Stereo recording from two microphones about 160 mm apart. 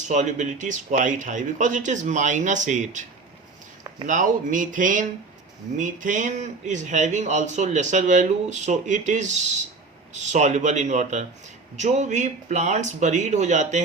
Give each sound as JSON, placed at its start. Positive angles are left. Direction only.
{"t": 0.0, "sound": "speech", "side_deg": -50}